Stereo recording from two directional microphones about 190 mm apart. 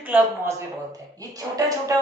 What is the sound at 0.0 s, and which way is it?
Speech, 10° right (ahead or behind).